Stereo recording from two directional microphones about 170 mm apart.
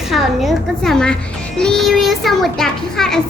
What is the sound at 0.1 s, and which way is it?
A woman's voice, centre (ahead or behind).